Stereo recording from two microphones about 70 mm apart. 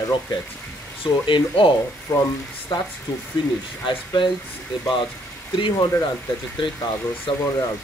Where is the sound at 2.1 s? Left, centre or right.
Left.